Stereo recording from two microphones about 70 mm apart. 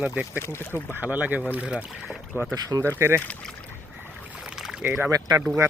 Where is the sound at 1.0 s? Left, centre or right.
Right.